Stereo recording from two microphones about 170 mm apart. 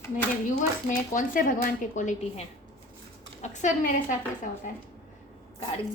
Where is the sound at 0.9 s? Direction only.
50° left (ahead or behind).